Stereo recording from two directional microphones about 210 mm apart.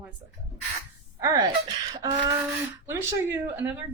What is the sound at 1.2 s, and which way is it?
Speech, 15° right (ahead or behind).